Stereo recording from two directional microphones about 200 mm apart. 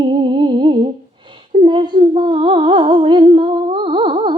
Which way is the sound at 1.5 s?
25° right (ahead or behind).